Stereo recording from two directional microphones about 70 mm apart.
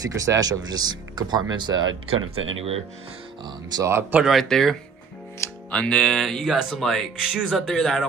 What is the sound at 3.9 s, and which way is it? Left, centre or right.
Speech, right.